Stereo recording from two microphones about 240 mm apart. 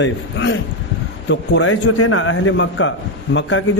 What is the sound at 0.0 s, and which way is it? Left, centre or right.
A man's voice, left.